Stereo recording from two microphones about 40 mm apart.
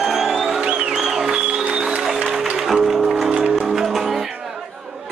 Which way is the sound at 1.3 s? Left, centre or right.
Right.